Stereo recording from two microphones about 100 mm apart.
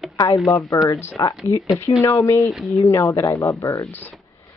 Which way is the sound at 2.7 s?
30° left (ahead or behind).